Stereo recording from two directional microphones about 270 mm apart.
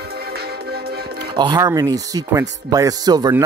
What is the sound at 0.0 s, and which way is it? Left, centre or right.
Music, right.